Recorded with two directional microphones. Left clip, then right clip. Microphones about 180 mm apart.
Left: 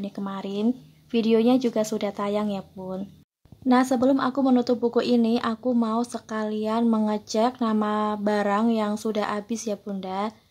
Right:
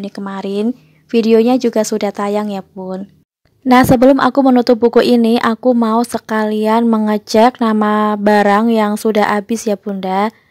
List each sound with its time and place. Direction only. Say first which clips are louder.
0.0 s speech: right 9 dB; 35° right (ahead or behind)